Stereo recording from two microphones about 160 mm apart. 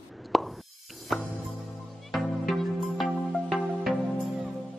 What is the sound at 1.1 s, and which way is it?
Music, centre (ahead or behind).